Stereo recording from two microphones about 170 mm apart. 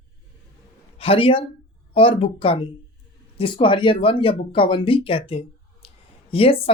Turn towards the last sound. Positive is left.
turn(degrees=35)  # may be behind; listen again after turning